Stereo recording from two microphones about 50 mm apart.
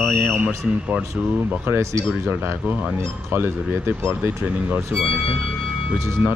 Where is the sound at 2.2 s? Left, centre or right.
Right.